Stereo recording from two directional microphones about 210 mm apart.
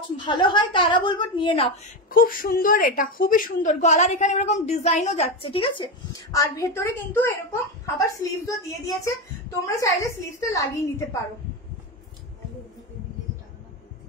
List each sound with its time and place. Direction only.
0.2 s a woman's voice: 20° left (ahead or behind)
2.0 s a woman's voice: 40° left (ahead or behind); by 10.8 s 15° left (ahead or behind)